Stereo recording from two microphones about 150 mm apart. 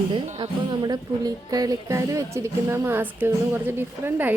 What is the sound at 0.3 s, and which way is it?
Speech, 30° right (ahead or behind).